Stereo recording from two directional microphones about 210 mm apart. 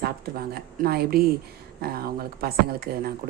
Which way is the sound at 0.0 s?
45° right (ahead or behind).